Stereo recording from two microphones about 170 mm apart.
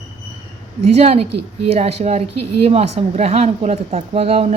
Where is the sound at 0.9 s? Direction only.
40° right (ahead or behind).